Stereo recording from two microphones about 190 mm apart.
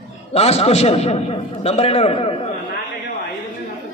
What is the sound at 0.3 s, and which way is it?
A man's voice, 35° left (ahead or behind).